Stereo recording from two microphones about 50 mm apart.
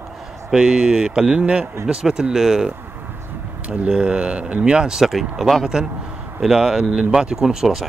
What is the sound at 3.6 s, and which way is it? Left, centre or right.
Speech, right.